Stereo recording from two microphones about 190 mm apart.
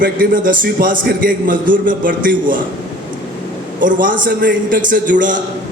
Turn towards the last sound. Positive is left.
turn(degrees=-45)  # may be behind; listen again after turning